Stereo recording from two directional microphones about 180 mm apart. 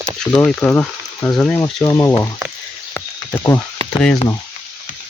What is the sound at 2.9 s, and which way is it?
Frog, 15° left (ahead or behind).